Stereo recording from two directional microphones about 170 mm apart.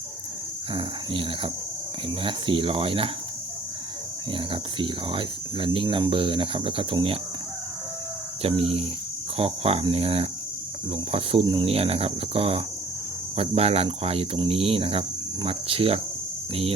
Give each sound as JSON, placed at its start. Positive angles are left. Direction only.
{"t": 0.7, "sound": "cricket", "side_deg": -30}
{"t": 2.0, "sound": "speech", "side_deg": -30}
{"t": 4.3, "sound": "speech", "side_deg": -30}
{"t": 8.4, "sound": "speech", "side_deg": -35}